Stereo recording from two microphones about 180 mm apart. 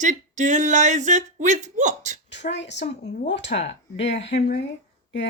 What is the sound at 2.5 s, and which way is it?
A woman's voice, 75° left (ahead or behind).